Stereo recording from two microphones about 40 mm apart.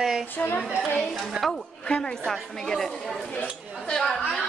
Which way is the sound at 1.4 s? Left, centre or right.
Centre.